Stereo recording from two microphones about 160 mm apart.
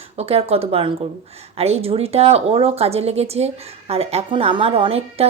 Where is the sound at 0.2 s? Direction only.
35° right (ahead or behind).